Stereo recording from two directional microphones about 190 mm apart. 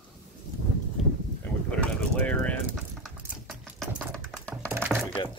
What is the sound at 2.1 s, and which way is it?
Vehicle, 5° left (ahead or behind).